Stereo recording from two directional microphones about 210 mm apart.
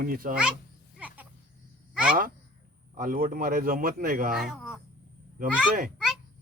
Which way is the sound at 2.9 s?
40° right (ahead or behind).